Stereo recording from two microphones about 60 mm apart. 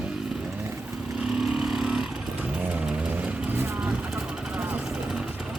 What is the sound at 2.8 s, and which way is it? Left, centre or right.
Vehicle, centre.